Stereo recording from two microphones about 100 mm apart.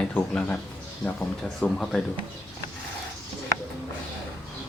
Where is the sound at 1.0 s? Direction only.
10° left (ahead or behind).